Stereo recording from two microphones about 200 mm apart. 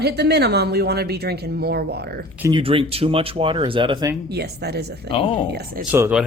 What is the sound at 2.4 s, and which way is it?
Speech, 25° right (ahead or behind).